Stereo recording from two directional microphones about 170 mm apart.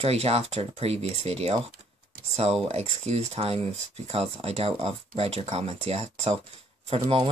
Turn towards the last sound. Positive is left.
turn(degrees=-35)  # may be behind; listen again after turning